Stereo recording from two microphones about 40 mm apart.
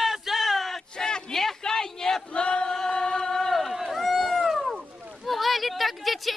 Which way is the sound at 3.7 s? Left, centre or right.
Centre.